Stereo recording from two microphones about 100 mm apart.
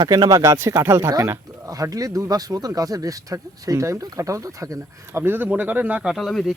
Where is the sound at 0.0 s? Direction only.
45° right (ahead or behind).